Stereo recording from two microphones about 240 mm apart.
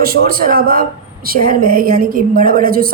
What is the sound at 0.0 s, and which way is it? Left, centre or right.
A woman's voice, right.